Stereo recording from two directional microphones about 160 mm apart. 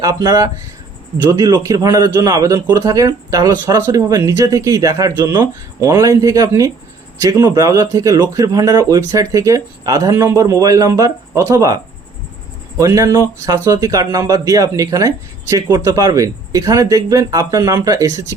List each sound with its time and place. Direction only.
0.0 s speech: 20° right (ahead or behind)